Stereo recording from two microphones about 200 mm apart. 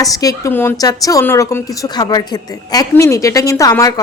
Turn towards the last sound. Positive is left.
turn(degrees=20)  # may be behind; listen again after turning